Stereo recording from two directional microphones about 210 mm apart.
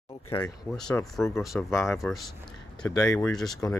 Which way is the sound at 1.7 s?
15° left (ahead or behind).